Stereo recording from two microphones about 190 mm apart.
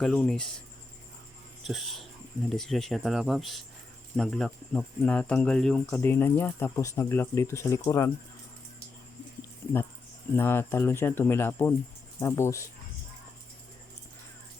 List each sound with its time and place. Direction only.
0.0 s speech: 5° left (ahead or behind)
1.6 s speech: centre (ahead or behind); by 8.1 s 15° left (ahead or behind)
10.3 s speech: 10° left (ahead or behind)